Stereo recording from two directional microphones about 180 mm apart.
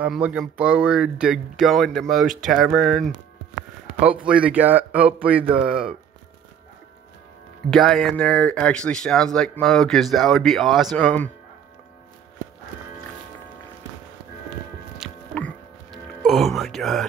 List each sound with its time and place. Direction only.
0.0 s speech: 5° right (ahead or behind)
7.7 s speech: centre (ahead or behind)
15.0 s music: 5° left (ahead or behind)
16.3 s speech: centre (ahead or behind)